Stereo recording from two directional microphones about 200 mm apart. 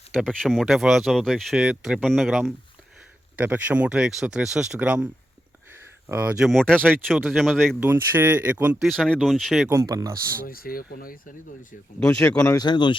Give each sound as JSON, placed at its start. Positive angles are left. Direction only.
{"t": 0.1, "sound": "speech", "side_deg": 5}
{"t": 6.1, "sound": "speech", "side_deg": -5}
{"t": 7.9, "sound": "speech", "side_deg": -10}
{"t": 8.9, "sound": "speech", "side_deg": 5}
{"t": 9.6, "sound": "speech", "side_deg": -15}
{"t": 10.4, "sound": "speech", "side_deg": 45}
{"t": 11.9, "sound": "speech", "side_deg": 5}
{"t": 12.4, "sound": "speech", "side_deg": 15}